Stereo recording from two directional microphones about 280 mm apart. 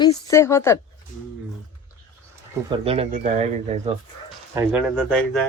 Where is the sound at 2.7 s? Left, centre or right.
Right.